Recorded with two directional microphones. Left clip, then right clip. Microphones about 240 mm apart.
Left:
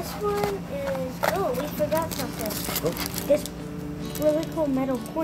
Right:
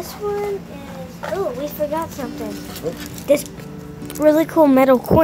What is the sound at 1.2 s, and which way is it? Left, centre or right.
Speech, left.